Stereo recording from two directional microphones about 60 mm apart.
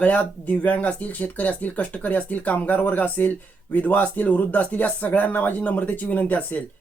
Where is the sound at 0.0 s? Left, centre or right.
Left.